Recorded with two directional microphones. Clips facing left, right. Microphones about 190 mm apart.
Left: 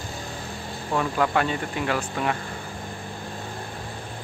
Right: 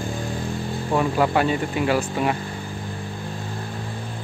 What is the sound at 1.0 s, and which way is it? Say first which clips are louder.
Speech: right 3 dB; 10° right (ahead or behind).